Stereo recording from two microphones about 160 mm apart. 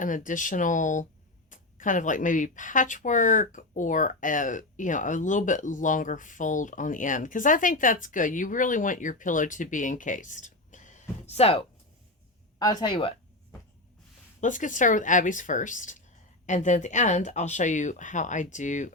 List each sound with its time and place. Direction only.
0.0 s speech: 55° left (ahead or behind); by 11.6 s 40° left (ahead or behind)
12.5 s speech: 25° left (ahead or behind)
14.4 s speech: 55° left (ahead or behind)